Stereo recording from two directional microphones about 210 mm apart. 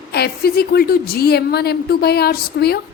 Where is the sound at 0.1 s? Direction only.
50° left (ahead or behind).